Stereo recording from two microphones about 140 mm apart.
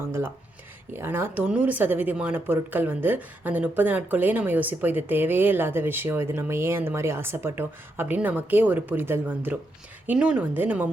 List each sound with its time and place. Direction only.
0.0 s speech: 20° right (ahead or behind)